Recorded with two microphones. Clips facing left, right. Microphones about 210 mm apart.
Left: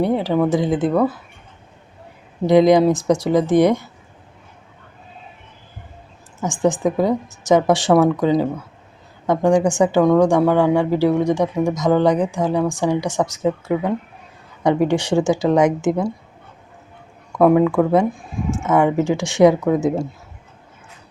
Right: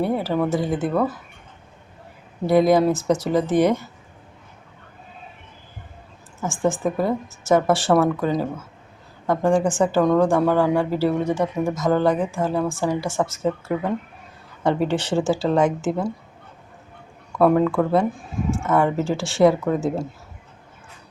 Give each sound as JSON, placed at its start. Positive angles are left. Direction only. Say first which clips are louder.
{"t": 0.3, "sound": "speech", "louder": "left 4 dB", "side_deg": 15}
{"t": 2.5, "sound": "speech", "louder": "left 4 dB", "side_deg": 15}
{"t": 6.4, "sound": "speech", "louder": "left 4 dB", "side_deg": 15}
{"t": 9.3, "sound": "speech", "louder": "left 3 dB", "side_deg": 15}
{"t": 17.3, "sound": "speech", "louder": "left 3 dB", "side_deg": 10}